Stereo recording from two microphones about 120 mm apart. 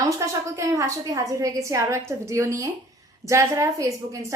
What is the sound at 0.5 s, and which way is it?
A woman's voice, 25° right (ahead or behind).